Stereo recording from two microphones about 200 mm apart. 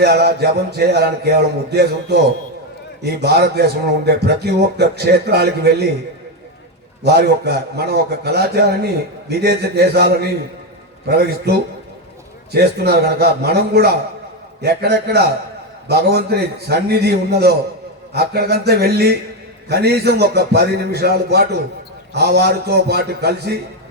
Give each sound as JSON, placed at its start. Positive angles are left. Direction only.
{"t": 0.0, "sound": "speech", "side_deg": -55}
{"t": 7.0, "sound": "a man's voice", "side_deg": -55}